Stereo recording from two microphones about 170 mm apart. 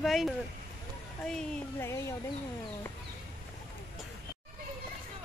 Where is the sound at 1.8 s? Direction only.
15° left (ahead or behind).